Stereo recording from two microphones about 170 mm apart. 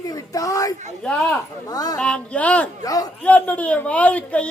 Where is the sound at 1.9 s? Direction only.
5° left (ahead or behind).